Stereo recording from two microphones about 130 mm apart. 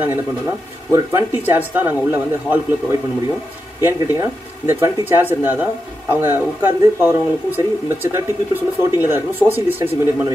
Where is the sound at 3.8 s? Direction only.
15° right (ahead or behind).